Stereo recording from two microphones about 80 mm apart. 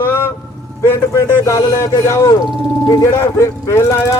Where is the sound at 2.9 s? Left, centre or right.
Left.